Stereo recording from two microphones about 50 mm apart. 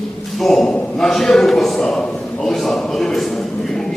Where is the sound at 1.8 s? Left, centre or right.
Centre.